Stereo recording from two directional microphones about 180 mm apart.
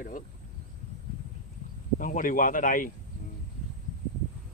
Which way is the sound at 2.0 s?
50° left (ahead or behind).